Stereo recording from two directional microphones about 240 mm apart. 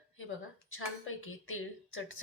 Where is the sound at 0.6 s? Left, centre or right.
Left.